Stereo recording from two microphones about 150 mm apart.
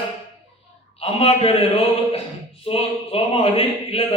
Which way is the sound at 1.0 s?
40° left (ahead or behind).